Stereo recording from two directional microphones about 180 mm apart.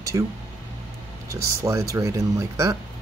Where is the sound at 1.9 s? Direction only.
15° right (ahead or behind).